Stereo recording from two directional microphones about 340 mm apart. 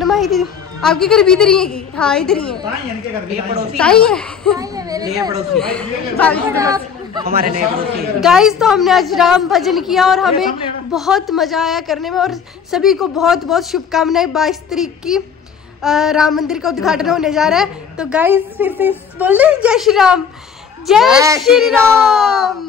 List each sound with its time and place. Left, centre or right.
0.0 s a woman's voice: centre
3.7 s a woman's voice: centre
4.6 s a sound: centre
5.5 s a woman's voice: centre
6.6 s speech: centre
7.2 s a man's voice: right
8.2 s a woman's voice: centre